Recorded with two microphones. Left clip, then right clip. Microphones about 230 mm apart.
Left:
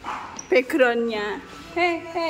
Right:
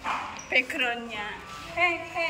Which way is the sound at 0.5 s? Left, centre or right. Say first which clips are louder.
Left 7 dB; left.